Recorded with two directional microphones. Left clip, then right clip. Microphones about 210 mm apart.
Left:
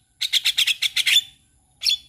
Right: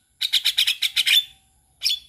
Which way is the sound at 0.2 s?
10° left (ahead or behind).